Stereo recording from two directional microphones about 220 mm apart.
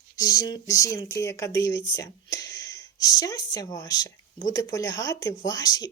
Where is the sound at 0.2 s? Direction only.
15° left (ahead or behind).